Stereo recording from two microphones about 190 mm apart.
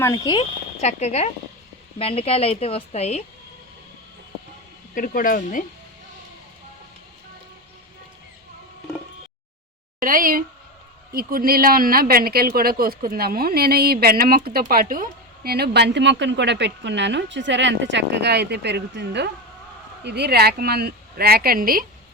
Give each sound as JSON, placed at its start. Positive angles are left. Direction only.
{"t": 0.0, "sound": "speech", "side_deg": 20}
{"t": 0.8, "sound": "a woman's voice", "side_deg": 35}
{"t": 4.9, "sound": "speech", "side_deg": 45}
{"t": 10.0, "sound": "speech", "side_deg": -45}